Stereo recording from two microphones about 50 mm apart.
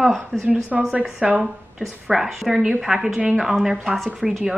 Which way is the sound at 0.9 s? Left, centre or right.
Right.